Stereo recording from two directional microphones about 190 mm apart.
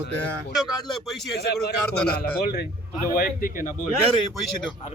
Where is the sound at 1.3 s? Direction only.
55° left (ahead or behind).